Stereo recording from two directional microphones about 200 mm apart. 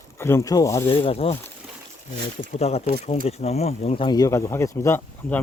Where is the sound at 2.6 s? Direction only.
30° left (ahead or behind).